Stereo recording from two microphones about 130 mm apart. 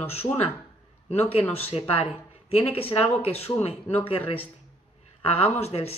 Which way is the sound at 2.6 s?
50° left (ahead or behind).